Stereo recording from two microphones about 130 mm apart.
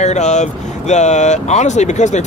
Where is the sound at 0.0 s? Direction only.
65° left (ahead or behind).